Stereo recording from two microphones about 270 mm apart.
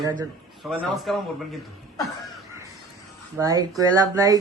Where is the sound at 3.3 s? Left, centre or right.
Centre.